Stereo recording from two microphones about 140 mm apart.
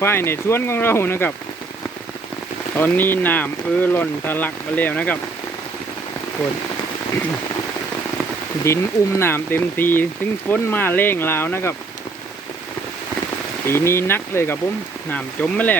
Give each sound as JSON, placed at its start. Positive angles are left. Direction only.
{"t": 0.0, "sound": "speech", "side_deg": 15}
{"t": 2.7, "sound": "speech", "side_deg": 15}
{"t": 8.6, "sound": "speech", "side_deg": 20}
{"t": 13.7, "sound": "speech", "side_deg": 20}